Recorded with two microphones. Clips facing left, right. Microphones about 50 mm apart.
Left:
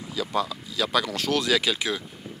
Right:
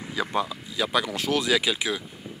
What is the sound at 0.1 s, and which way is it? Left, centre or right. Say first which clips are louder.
Speech: even; right.